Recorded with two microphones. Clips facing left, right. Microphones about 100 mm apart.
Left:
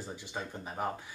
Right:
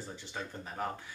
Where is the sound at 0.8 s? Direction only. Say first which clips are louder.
Left 2 dB; 15° left (ahead or behind).